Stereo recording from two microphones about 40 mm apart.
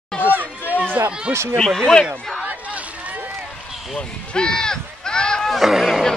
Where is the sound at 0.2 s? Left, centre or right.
Right.